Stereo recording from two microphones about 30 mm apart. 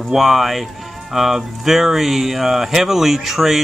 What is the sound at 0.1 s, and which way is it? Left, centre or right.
Speech, centre.